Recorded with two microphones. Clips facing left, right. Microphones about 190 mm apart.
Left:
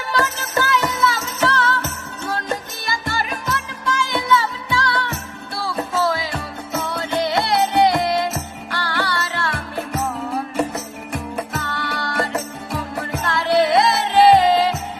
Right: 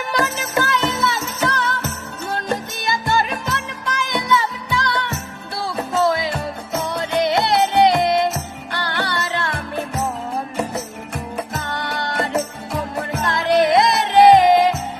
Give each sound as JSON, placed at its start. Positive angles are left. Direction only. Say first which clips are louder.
{"t": 0.1, "sound": "music", "louder": "even", "side_deg": -15}
{"t": 2.8, "sound": "music", "louder": "right 5 dB", "side_deg": -25}
{"t": 11.6, "sound": "music", "louder": "right 1 dB", "side_deg": -20}